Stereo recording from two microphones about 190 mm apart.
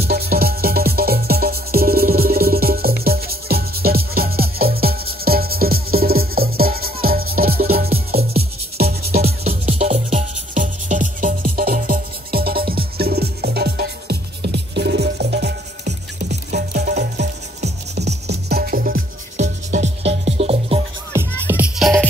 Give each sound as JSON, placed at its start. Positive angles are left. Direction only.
{"t": 0.0, "sound": "music", "side_deg": -55}
{"t": 9.7, "sound": "music", "side_deg": -35}
{"t": 21.1, "sound": "music", "side_deg": -10}